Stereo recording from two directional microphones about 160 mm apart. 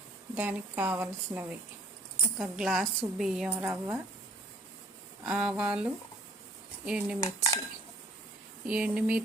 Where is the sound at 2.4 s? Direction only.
Centre (ahead or behind).